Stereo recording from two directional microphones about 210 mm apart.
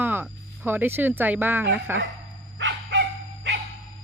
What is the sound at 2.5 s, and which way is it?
Dog, 60° right (ahead or behind).